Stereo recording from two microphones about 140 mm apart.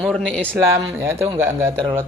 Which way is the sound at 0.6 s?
20° right (ahead or behind).